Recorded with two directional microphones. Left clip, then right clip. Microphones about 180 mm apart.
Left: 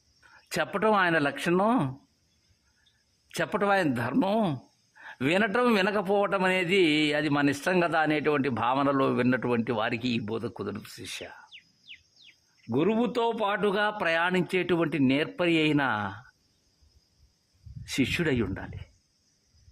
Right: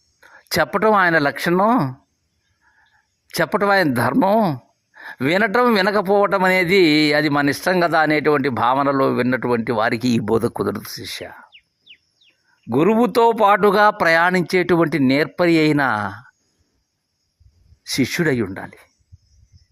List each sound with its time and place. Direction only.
0.2 s speech: 25° right (ahead or behind)
3.3 s speech: 30° right (ahead or behind)
12.7 s speech: 40° right (ahead or behind)
17.9 s speech: 25° right (ahead or behind)